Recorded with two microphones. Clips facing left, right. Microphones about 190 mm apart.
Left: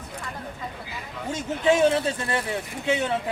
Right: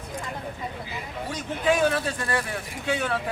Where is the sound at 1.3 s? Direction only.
25° left (ahead or behind).